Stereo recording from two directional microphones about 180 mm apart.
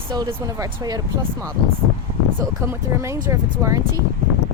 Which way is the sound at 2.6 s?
15° right (ahead or behind).